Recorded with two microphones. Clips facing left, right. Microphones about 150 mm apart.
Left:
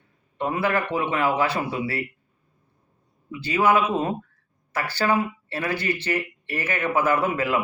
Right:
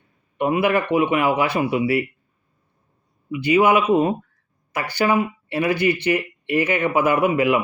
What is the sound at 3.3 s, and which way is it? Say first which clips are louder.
Speech: right 4 dB; 15° right (ahead or behind).